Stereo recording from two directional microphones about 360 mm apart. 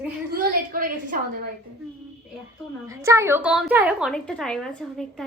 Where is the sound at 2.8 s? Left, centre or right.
Centre.